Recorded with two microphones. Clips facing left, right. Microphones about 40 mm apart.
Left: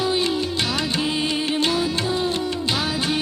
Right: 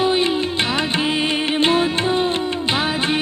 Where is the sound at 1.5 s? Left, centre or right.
Right.